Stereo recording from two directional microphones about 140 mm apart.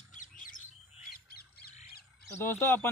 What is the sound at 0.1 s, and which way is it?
Bird, 70° left (ahead or behind).